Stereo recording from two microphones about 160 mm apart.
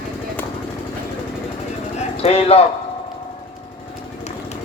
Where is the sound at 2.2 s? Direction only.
40° left (ahead or behind).